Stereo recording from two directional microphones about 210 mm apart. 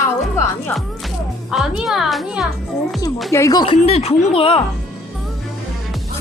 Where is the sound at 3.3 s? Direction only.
15° left (ahead or behind).